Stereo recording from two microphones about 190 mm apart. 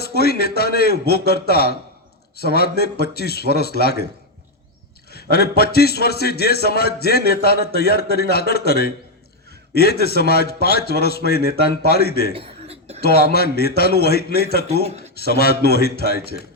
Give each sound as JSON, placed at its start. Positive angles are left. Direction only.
{"t": 0.0, "sound": "a man's voice", "side_deg": 55}
{"t": 5.1, "sound": "a man's voice", "side_deg": 55}
{"t": 12.3, "sound": "cough", "side_deg": -30}
{"t": 13.0, "sound": "a man's voice", "side_deg": 55}
{"t": 14.8, "sound": "speech", "side_deg": -35}
{"t": 15.3, "sound": "a man's voice", "side_deg": 55}